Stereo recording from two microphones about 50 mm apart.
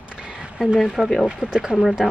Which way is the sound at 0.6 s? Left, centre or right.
Centre.